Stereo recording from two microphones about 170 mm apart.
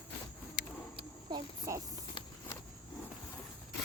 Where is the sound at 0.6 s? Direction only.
70° left (ahead or behind).